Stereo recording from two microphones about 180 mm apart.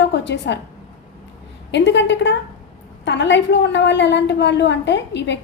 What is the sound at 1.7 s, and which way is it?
A woman's voice, 80° left.